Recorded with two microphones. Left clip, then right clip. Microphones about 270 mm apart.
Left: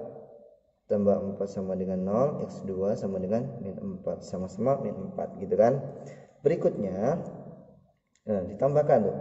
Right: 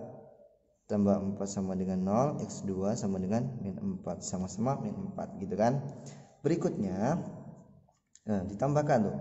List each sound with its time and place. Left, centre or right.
0.8 s a man's voice: right
8.3 s a man's voice: centre